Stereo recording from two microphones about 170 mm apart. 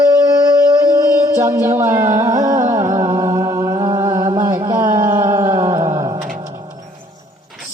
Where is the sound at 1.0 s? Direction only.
20° right (ahead or behind).